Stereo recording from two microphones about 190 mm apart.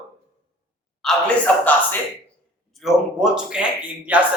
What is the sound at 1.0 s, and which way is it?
Speech, 5° left (ahead or behind).